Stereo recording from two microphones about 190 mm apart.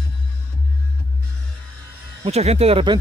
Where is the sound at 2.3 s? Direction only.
35° right (ahead or behind).